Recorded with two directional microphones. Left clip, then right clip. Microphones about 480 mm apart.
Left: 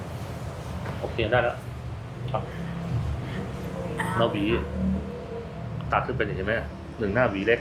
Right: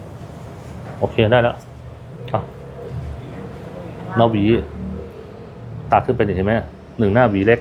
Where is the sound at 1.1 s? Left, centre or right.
Right.